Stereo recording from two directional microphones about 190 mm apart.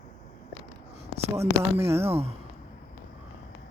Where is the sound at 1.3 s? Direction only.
15° right (ahead or behind).